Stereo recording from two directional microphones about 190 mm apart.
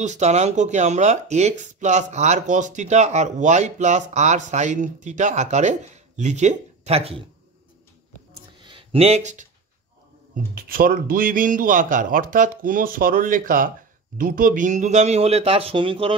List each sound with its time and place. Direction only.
0.0 s speech: 35° right (ahead or behind)
8.5 s a sound: 25° right (ahead or behind)
10.3 s speech: 50° right (ahead or behind); by 16.2 s 25° right (ahead or behind)